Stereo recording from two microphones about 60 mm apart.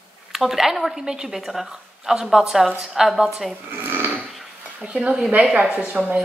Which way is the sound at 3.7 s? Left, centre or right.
Right.